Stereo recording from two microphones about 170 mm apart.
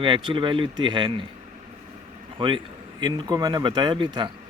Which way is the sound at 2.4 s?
30° right (ahead or behind).